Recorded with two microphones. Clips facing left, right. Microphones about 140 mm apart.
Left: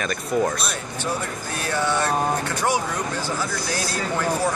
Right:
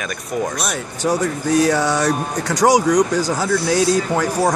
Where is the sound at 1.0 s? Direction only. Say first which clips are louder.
Right 10 dB; 90° right.